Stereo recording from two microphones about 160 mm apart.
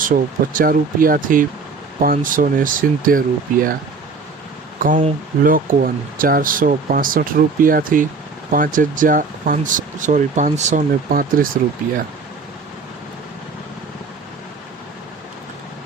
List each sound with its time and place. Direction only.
0.1 s speech: 60° right (ahead or behind)
4.8 s speech: 55° right (ahead or behind)